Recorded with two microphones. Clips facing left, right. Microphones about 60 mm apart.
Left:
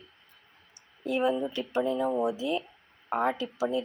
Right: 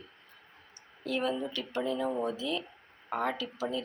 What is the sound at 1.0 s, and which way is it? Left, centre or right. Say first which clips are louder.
Speech: left 5 dB; centre.